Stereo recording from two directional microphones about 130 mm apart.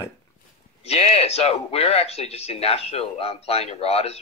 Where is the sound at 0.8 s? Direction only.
50° left (ahead or behind).